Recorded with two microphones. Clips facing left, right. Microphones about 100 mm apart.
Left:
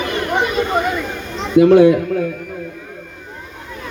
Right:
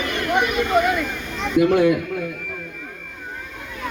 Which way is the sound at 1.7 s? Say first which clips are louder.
Left 7 dB; 30° left (ahead or behind).